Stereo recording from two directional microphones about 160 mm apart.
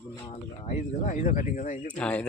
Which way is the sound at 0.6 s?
45° left (ahead or behind).